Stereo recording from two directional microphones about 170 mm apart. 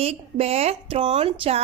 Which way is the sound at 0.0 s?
35° right (ahead or behind).